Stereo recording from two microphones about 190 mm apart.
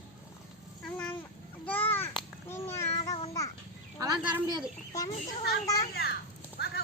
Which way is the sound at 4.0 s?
20° right (ahead or behind).